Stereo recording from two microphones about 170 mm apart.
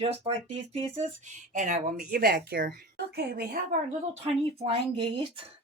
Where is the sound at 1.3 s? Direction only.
45° right (ahead or behind); by 2.7 s 65° right (ahead or behind).